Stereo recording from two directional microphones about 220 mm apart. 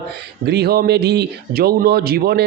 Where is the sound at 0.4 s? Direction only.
45° right (ahead or behind).